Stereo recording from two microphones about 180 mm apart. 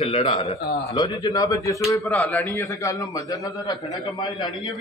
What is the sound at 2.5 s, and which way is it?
A man's voice, 15° left (ahead or behind).